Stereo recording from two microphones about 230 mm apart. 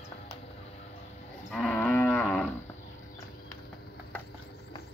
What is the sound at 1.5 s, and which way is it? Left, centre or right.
Moo, centre.